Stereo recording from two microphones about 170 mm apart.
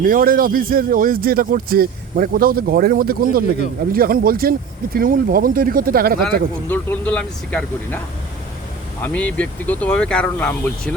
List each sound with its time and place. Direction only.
0.0 s a man's voice: 60° right (ahead or behind)
6.7 s speech: 10° left (ahead or behind)
9.0 s speech: 10° left (ahead or behind)